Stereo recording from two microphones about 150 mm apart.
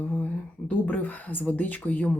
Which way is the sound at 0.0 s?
10° left (ahead or behind).